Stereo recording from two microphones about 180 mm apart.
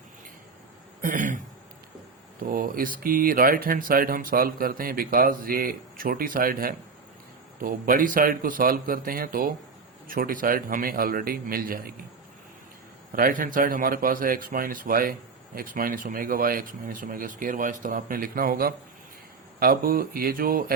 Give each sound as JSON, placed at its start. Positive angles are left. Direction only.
{"t": 1.0, "sound": "a sound", "side_deg": -45}
{"t": 2.4, "sound": "speech", "side_deg": -55}
{"t": 13.1, "sound": "speech", "side_deg": -50}